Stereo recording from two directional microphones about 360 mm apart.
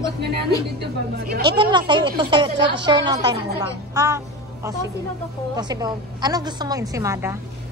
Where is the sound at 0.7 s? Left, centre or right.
Right.